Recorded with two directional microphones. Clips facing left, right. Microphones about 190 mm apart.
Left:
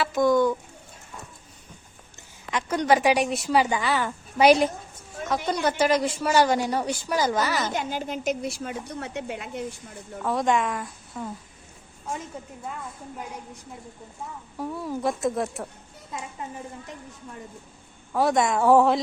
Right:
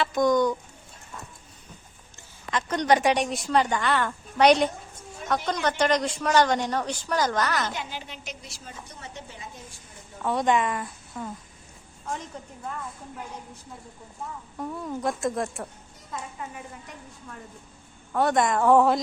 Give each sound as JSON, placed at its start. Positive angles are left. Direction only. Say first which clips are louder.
{"t": 0.0, "sound": "a sound", "louder": "left 1 dB", "side_deg": 5}
{"t": 2.5, "sound": "a woman's voice", "louder": "left 1 dB", "side_deg": 10}
{"t": 7.7, "sound": "a woman's voice", "louder": "left 7 dB", "side_deg": 45}
{"t": 10.2, "sound": "a woman's voice", "louder": "even", "side_deg": 0}
{"t": 12.4, "sound": "a woman's voice", "louder": "left 2 dB", "side_deg": 10}
{"t": 14.6, "sound": "speech", "louder": "left 2 dB", "side_deg": 5}
{"t": 18.1, "sound": "a woman's voice", "louder": "left 1 dB", "side_deg": 0}